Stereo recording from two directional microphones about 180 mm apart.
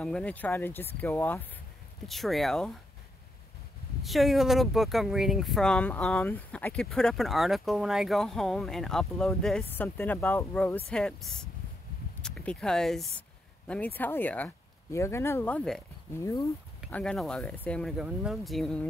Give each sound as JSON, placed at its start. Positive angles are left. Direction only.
{"t": 0.0, "sound": "speech", "side_deg": 5}
{"t": 4.0, "sound": "speech", "side_deg": 0}
{"t": 16.2, "sound": "speech", "side_deg": 15}
{"t": 16.9, "sound": "speech", "side_deg": 5}